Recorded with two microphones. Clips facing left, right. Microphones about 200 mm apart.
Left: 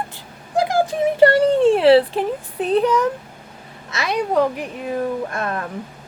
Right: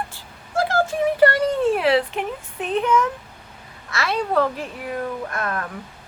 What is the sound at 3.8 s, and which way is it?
A child's voice, 20° left (ahead or behind).